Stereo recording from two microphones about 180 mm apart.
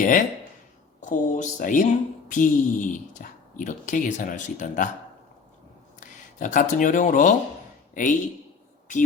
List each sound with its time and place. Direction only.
0.0 s speech: 45° left (ahead or behind)
6.0 s speech: 45° left (ahead or behind)